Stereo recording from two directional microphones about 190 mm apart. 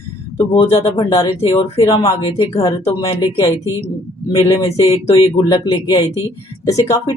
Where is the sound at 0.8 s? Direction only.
15° left (ahead or behind).